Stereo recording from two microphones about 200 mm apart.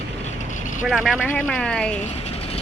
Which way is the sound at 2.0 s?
30° left (ahead or behind).